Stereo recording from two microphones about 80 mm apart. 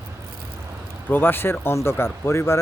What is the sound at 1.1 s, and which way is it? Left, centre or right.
Speech, left.